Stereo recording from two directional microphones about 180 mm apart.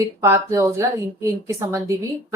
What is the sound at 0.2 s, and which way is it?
A woman's voice, 15° right (ahead or behind).